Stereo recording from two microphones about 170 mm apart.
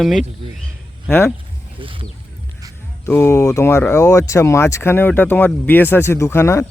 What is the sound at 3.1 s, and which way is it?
Speech, 15° left (ahead or behind).